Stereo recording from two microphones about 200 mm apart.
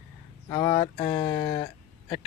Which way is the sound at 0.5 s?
20° left (ahead or behind).